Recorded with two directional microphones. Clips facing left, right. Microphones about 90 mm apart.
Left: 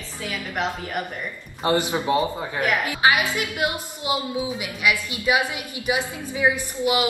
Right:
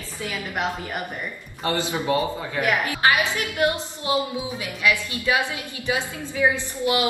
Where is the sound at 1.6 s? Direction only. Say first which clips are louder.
Left 3 dB; 20° left (ahead or behind).